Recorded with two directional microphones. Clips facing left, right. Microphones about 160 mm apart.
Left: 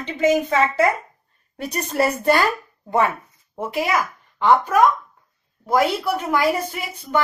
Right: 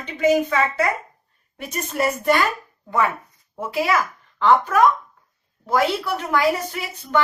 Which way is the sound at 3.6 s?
20° left (ahead or behind).